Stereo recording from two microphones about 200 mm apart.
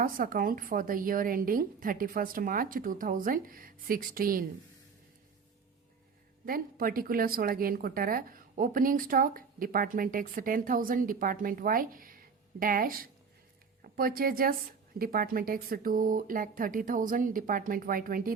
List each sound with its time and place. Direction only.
0.0 s a woman's voice: 45° right (ahead or behind)
6.4 s a woman's voice: 45° right (ahead or behind)